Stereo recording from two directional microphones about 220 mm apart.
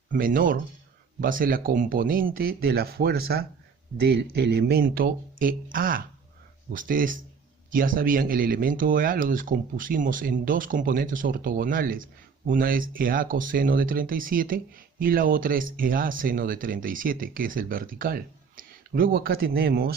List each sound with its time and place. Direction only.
0.1 s speech: 40° right (ahead or behind)